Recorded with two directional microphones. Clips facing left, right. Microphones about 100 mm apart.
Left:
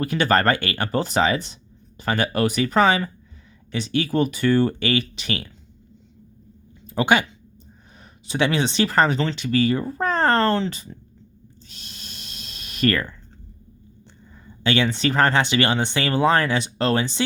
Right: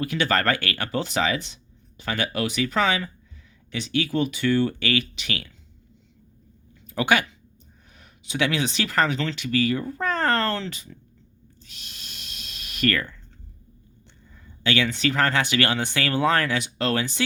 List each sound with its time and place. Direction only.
0.0 s speech: 40° left (ahead or behind)
0.9 s speech: 40° left (ahead or behind)
4.8 s speech: 30° left (ahead or behind)
6.8 s speech: 25° left (ahead or behind)
11.6 s a sound: 35° left (ahead or behind)
14.6 s speech: 30° left (ahead or behind)